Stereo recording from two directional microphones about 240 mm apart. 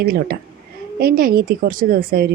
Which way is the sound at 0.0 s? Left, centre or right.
Right.